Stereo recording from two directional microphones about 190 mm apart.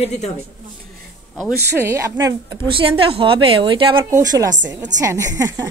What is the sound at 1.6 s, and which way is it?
Speech, 10° right (ahead or behind).